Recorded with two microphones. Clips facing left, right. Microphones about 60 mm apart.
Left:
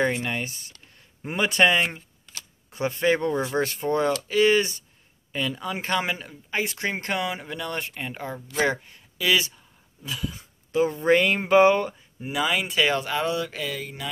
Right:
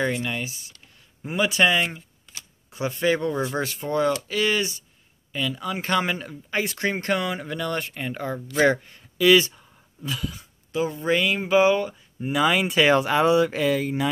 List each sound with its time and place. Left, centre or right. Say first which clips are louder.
0.0 s speech: left 1 dB; left
0.5 s speech: right 1 dB; left
2.2 s camera: left 1 dB; centre
3.0 s speech: even; left
5.6 s speech: right 4 dB; centre
6.6 s speech: right 2 dB; left; by 10.3 s centre
10.7 s speech: left 3 dB; left
12.2 s speech: right 4 dB; centre; by 14.0 s right